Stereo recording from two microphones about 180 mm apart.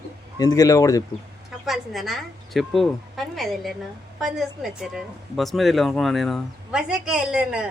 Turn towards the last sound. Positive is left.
turn(degrees=-5)  # may be behind; listen again after turning